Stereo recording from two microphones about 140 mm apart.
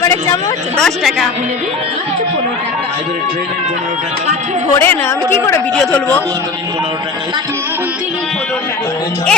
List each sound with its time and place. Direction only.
0.0 s a sound: 20° left (ahead or behind)
0.8 s a woman's voice: centre (ahead or behind)
4.8 s a woman's voice: 15° left (ahead or behind)
5.7 s a woman's voice: 5° left (ahead or behind)